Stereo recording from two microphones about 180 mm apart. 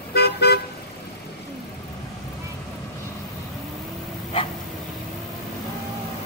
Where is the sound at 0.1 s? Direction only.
60° left (ahead or behind).